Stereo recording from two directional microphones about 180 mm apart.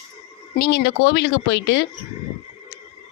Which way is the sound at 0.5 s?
70° left (ahead or behind).